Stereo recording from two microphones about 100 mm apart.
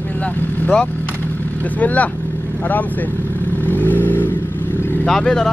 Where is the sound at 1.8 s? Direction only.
15° left (ahead or behind).